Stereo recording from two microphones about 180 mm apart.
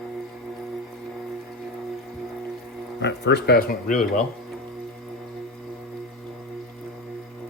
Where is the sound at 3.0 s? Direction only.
70° left (ahead or behind); by 4.2 s 45° left (ahead or behind).